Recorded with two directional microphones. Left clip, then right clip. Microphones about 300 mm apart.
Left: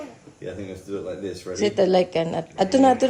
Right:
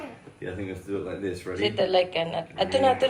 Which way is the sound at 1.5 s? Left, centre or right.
Left.